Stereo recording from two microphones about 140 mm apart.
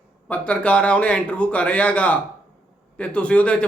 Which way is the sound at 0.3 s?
10° left (ahead or behind).